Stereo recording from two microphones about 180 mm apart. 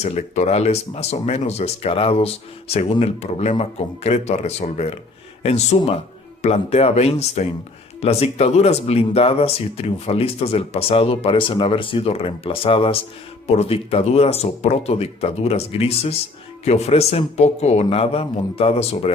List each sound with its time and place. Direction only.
0.0 s speech: 35° left (ahead or behind)